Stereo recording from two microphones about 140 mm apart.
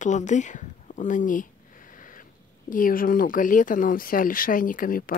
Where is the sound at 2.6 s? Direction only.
80° left.